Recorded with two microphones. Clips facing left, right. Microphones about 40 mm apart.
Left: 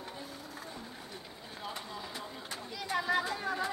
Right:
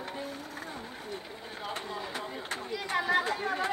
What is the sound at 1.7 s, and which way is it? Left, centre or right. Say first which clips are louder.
Chatter: right 6 dB; right.